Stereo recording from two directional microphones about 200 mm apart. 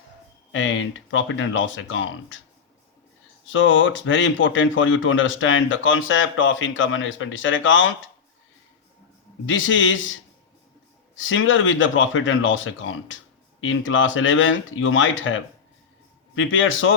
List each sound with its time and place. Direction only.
0.5 s speech: 75° left (ahead or behind)
3.4 s speech: 75° left (ahead or behind)
9.5 s speech: 70° left (ahead or behind)
11.2 s a man's voice: 75° left (ahead or behind)